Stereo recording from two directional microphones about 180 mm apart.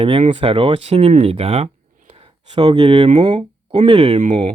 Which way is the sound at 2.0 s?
35° right (ahead or behind).